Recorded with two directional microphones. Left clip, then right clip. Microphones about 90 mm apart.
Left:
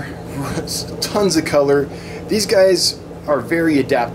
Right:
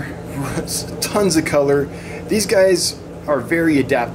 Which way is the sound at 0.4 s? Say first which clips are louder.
Left 1 dB; 5° right (ahead or behind).